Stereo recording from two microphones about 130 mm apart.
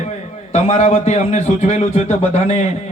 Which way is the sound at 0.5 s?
60° left (ahead or behind).